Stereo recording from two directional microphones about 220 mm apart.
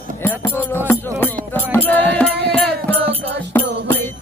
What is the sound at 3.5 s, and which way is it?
Music, 10° left (ahead or behind).